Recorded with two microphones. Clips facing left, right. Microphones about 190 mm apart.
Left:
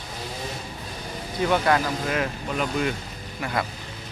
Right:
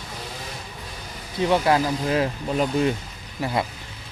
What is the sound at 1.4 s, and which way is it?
Speech, 25° right (ahead or behind).